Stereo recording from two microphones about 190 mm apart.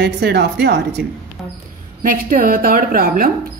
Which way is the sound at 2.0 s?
45° right (ahead or behind).